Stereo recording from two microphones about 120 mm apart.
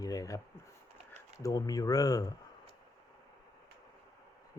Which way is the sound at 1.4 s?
30° left (ahead or behind).